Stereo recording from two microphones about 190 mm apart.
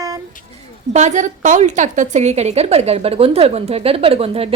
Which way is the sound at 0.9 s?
40° right (ahead or behind).